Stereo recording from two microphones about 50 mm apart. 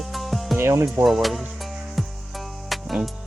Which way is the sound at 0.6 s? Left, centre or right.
Right.